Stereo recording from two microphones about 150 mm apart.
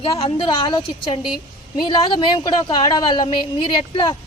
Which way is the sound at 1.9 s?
35° left (ahead or behind).